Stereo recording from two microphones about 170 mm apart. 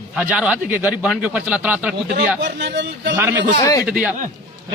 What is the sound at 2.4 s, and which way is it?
Speech, 90° right.